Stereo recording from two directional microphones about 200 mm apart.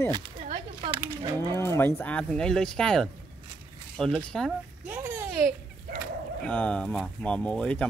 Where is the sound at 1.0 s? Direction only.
20° right (ahead or behind).